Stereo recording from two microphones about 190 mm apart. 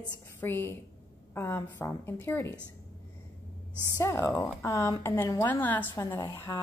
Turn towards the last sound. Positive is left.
turn(degrees=10)  # may be behind; listen again after turning